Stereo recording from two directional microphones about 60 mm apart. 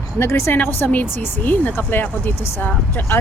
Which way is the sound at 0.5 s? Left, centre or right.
Left.